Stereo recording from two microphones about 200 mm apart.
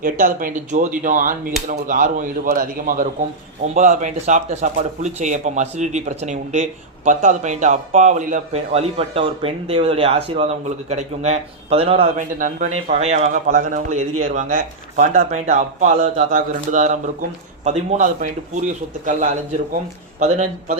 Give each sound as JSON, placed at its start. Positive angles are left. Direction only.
{"t": 0.0, "sound": "speech", "side_deg": -45}
{"t": 20.1, "sound": "speech", "side_deg": -35}